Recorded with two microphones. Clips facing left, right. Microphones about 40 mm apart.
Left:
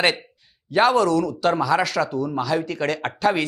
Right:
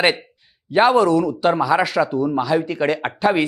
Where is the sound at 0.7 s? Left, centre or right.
Centre.